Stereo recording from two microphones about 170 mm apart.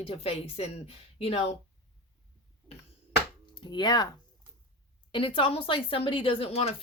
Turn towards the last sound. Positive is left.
turn(degrees=35)  # may be behind; listen again after turning